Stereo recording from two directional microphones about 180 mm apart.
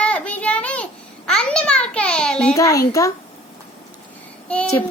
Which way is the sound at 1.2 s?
5° left (ahead or behind).